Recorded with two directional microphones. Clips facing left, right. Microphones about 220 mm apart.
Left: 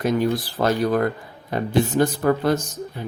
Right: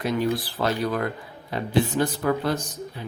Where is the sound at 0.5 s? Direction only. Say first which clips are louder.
Left 5 dB; 45° left (ahead or behind).